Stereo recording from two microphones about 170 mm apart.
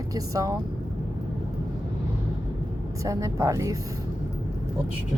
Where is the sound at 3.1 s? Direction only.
20° right (ahead or behind).